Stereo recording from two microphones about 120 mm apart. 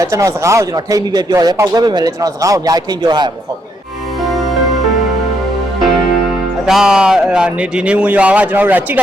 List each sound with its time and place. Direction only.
0.0 s speech: 25° right (ahead or behind)
6.7 s speech: 5° right (ahead or behind)